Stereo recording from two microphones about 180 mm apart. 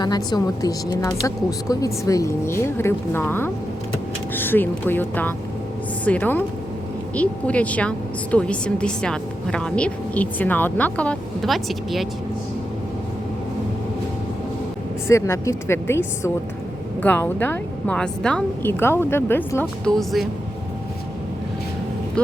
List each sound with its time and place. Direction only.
0.0 s a woman's voice: 25° left (ahead or behind); by 12.0 s centre (ahead or behind)
15.0 s a woman's voice: 15° left (ahead or behind)